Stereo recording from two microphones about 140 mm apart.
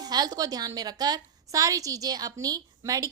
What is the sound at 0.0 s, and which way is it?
A woman's voice, 30° right (ahead or behind).